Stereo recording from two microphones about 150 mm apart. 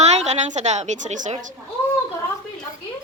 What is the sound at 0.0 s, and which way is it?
A woman's voice, 50° right (ahead or behind).